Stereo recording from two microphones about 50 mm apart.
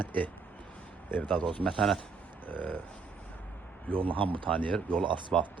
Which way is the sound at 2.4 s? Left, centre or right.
Left.